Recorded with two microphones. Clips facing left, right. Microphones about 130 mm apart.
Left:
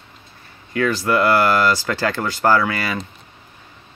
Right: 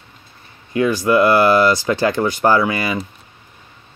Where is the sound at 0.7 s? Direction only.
15° right (ahead or behind).